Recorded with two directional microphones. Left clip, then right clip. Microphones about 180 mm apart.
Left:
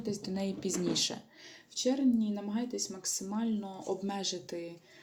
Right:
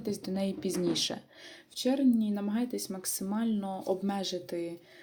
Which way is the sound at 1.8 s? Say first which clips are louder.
Right 2 dB; 30° right (ahead or behind).